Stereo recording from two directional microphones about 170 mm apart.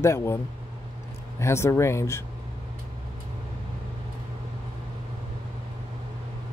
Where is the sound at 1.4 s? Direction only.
15° left (ahead or behind).